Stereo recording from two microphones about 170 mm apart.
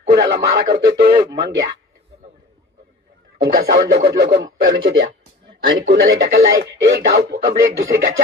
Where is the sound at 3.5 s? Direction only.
80° right.